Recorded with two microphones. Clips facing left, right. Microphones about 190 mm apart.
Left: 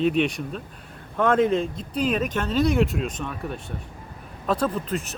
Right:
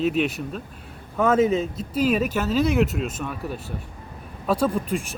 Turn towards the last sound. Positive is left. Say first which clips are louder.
# right 2 dB
turn(degrees=-10)  # may be behind; listen again after turning